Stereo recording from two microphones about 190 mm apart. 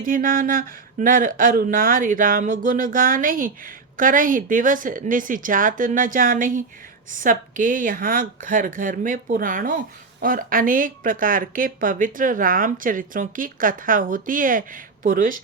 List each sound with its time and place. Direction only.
0.0 s speech: 45° right (ahead or behind)